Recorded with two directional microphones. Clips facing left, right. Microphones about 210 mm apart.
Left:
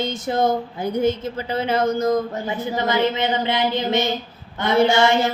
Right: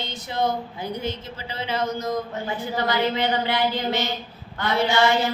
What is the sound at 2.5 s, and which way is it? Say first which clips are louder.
Speech: left 2 dB; 20° left (ahead or behind).